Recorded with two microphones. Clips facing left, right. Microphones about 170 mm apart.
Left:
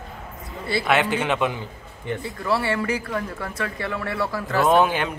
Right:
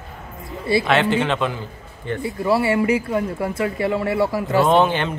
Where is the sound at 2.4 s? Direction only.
25° right (ahead or behind).